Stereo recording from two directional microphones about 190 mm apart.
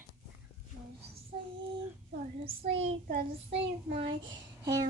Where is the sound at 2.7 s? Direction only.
80° right.